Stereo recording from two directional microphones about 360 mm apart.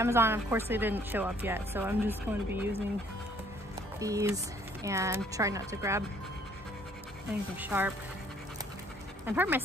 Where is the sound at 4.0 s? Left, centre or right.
Centre.